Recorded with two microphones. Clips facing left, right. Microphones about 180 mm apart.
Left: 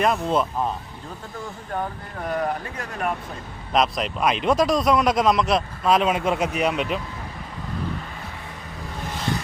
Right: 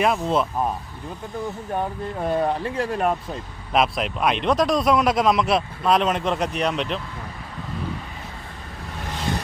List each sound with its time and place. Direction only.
0.0 s speech: centre (ahead or behind)
2.2 s speech: 25° right (ahead or behind)
3.7 s speech: 5° right (ahead or behind)